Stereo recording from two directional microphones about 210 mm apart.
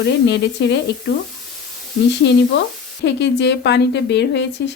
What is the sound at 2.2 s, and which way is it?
A woman's voice, 55° left (ahead or behind).